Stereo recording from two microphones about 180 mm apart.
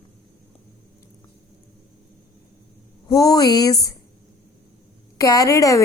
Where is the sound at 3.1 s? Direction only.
20° left (ahead or behind).